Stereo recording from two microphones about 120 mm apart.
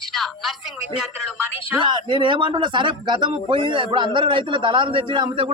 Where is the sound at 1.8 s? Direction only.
40° right (ahead or behind).